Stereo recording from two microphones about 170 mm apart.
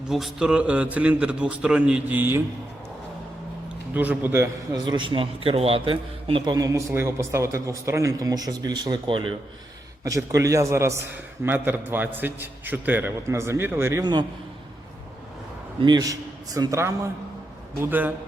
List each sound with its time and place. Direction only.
0.1 s a man's voice: centre (ahead or behind)
3.9 s a man's voice: 10° right (ahead or behind)
4.9 s a man's voice: 30° right (ahead or behind)
15.8 s a man's voice: 25° right (ahead or behind)